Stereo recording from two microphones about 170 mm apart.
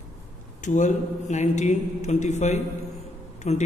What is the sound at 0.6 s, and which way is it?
A man's voice, 45° left (ahead or behind).